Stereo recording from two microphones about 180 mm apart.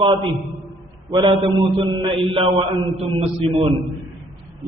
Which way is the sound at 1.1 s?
25° right (ahead or behind).